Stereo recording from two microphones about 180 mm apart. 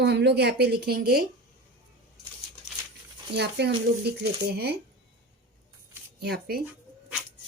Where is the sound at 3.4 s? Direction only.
70° right (ahead or behind).